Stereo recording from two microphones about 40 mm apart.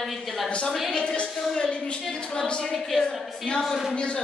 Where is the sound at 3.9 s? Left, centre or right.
Left.